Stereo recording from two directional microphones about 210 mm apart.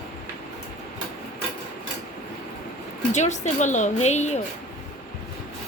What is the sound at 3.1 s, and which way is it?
A woman's voice, 35° left (ahead or behind).